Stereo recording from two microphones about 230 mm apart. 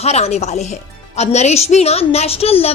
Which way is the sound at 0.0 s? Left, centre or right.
Left.